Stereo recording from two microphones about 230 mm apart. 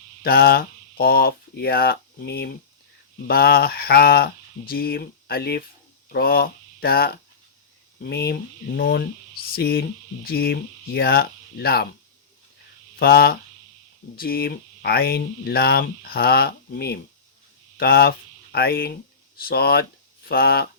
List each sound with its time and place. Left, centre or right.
0.2 s speech: left
13.0 s speech: left